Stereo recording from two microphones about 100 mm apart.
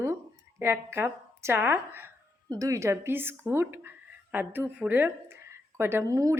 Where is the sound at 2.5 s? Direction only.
35° right (ahead or behind).